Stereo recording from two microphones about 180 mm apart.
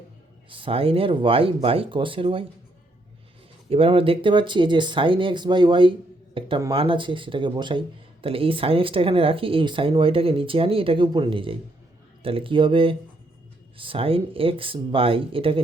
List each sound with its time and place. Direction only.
0.5 s speech: 30° right (ahead or behind)
3.7 s speech: 30° right (ahead or behind)